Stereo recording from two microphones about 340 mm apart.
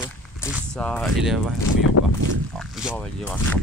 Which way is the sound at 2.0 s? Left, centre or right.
Left.